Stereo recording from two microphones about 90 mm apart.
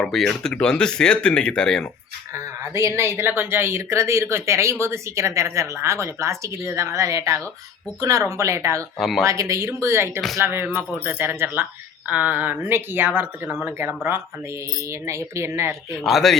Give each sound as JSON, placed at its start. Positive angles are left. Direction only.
{"t": 0.0, "sound": "speech", "side_deg": 5}
{"t": 2.3, "sound": "speech", "side_deg": -35}
{"t": 9.0, "sound": "a man's voice", "side_deg": 0}
{"t": 9.2, "sound": "speech", "side_deg": -35}
{"t": 15.9, "sound": "a man's voice", "side_deg": 0}